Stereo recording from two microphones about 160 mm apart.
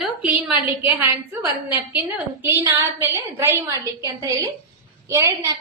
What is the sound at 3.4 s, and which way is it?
A woman's voice, 15° right (ahead or behind).